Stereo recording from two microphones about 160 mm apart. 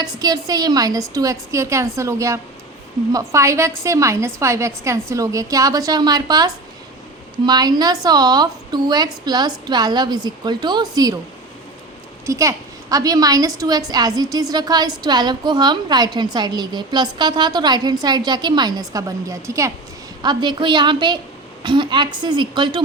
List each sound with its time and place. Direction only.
0.0 s a woman's voice: 25° right (ahead or behind)
12.2 s a woman's voice: 20° right (ahead or behind)
20.2 s a woman's voice: 30° right (ahead or behind)